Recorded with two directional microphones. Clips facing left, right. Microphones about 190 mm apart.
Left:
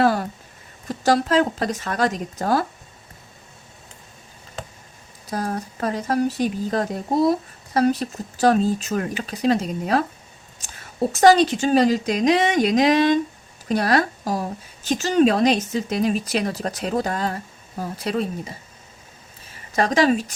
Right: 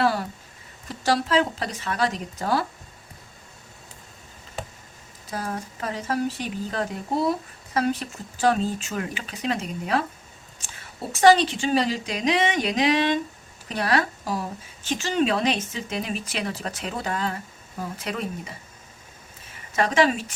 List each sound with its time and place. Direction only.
0.0 s a woman's voice: 45° left (ahead or behind)
5.3 s a woman's voice: 40° left (ahead or behind)
11.1 s a woman's voice: 40° left (ahead or behind)
19.7 s a woman's voice: 35° left (ahead or behind)